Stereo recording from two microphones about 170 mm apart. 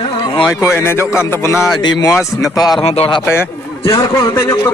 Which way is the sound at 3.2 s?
15° left (ahead or behind).